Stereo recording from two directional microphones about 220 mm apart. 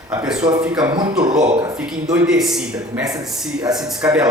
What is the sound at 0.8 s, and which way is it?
Speech, 20° right (ahead or behind).